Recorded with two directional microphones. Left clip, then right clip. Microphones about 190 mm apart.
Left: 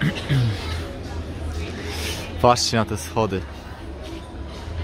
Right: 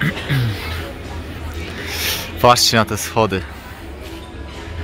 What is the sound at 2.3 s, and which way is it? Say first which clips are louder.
Speech: right 5 dB; 5° right (ahead or behind).